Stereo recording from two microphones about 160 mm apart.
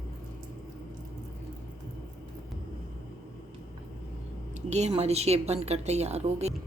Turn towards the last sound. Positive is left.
turn(degrees=-40)  # may be behind; listen again after turning